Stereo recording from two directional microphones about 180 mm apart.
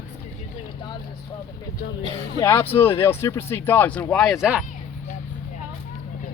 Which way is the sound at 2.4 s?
15° left (ahead or behind).